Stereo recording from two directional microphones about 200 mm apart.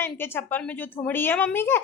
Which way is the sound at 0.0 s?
10° left (ahead or behind).